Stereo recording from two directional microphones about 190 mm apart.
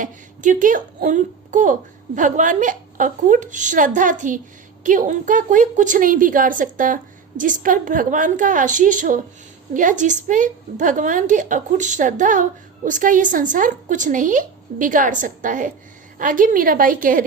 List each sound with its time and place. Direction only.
0.0 s a woman's voice: 45° right (ahead or behind)